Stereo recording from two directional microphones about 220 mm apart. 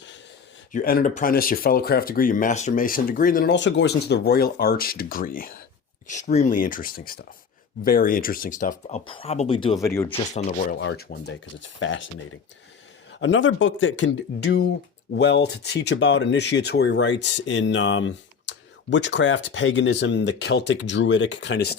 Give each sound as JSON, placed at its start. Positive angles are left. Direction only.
{"t": 0.7, "sound": "speech", "side_deg": 40}
{"t": 9.0, "sound": "speech", "side_deg": 25}
{"t": 10.1, "sound": "speech", "side_deg": 30}
{"t": 10.8, "sound": "speech", "side_deg": 50}
{"t": 11.8, "sound": "speech", "side_deg": 60}
{"t": 13.1, "sound": "speech", "side_deg": 55}